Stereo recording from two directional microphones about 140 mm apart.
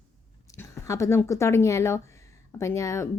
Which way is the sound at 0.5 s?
20° left (ahead or behind).